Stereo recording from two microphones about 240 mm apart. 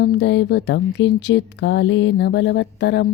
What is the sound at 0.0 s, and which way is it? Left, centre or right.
A woman's voice, left.